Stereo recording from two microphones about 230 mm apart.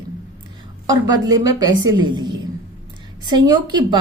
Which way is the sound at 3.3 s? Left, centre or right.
Centre.